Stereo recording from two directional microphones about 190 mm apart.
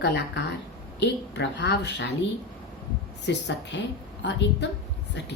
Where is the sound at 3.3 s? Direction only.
65° left (ahead or behind).